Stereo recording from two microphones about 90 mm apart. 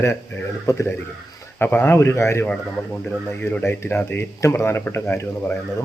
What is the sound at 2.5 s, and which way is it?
Speech, 15° left (ahead or behind).